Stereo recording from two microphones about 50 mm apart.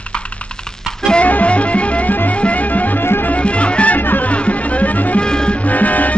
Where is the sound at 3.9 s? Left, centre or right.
Left.